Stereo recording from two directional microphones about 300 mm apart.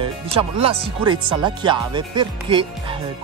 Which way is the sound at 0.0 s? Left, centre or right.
Centre.